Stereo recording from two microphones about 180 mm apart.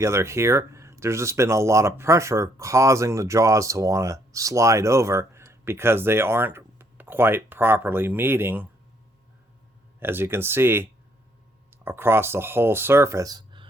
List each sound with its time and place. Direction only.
0.0 s speech: 15° right (ahead or behind)
10.0 s speech: 10° right (ahead or behind)